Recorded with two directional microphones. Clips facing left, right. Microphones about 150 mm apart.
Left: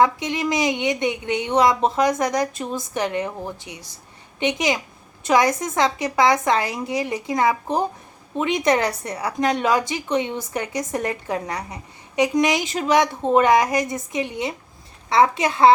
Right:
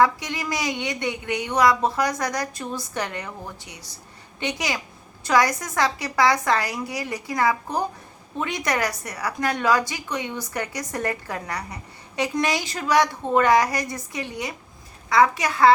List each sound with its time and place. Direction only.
0.0 s a woman's voice: 20° left (ahead or behind)